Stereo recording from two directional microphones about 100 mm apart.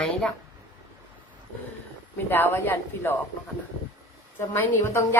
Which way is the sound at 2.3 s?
20° left (ahead or behind).